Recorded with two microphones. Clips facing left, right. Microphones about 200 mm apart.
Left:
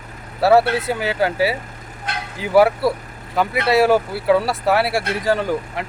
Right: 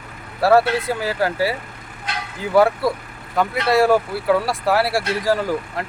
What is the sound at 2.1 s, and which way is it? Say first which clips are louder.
Vehicle: left 1 dB; 55° left (ahead or behind).